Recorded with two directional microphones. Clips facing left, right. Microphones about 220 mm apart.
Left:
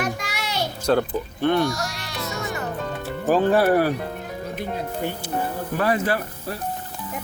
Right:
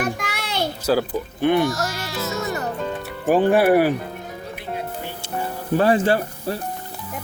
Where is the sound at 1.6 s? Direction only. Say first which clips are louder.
Right 3 dB; centre (ahead or behind).